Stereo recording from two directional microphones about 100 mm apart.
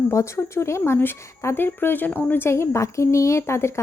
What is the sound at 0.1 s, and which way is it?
Speech, 30° left (ahead or behind).